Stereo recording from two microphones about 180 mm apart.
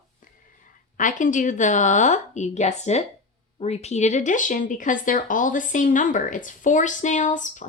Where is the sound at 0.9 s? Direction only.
45° left (ahead or behind).